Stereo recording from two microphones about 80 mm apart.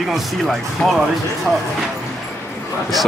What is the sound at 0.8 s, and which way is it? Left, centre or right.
Speech, centre.